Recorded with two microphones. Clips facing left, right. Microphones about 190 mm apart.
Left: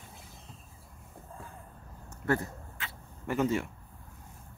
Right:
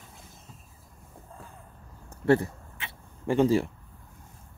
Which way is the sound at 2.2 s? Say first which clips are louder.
Right 8 dB; 25° right (ahead or behind).